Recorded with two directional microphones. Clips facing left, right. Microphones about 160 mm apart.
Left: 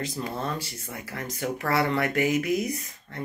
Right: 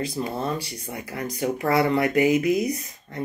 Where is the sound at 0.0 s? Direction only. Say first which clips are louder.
Right 4 dB; 10° right (ahead or behind).